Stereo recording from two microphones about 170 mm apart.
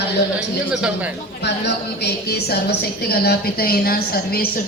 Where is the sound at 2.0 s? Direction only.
70° left (ahead or behind).